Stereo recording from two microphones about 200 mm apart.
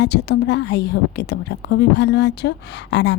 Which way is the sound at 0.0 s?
55° left (ahead or behind).